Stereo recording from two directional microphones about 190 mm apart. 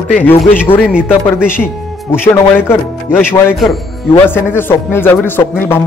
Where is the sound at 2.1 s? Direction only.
10° left (ahead or behind).